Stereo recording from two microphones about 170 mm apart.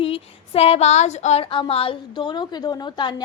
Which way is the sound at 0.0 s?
35° left (ahead or behind).